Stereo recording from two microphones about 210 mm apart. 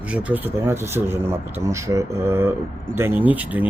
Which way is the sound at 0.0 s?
5° right (ahead or behind).